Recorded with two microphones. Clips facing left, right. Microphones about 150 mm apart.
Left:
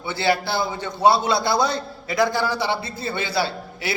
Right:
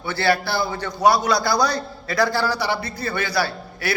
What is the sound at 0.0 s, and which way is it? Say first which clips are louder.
A man's voice: right 1 dB; 20° left (ahead or behind).